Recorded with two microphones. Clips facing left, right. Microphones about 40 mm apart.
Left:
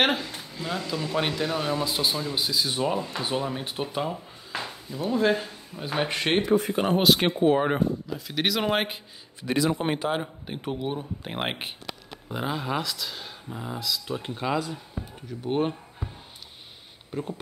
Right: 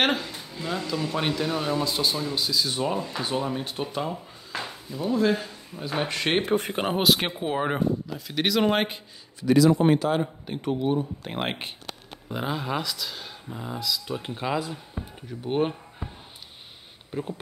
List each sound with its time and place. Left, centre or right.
0.0 s speech: centre
5.1 s speech: centre
6.4 s speech: right
7.0 s speech: centre
9.4 s speech: left; by 16.1 s centre
17.1 s speech: centre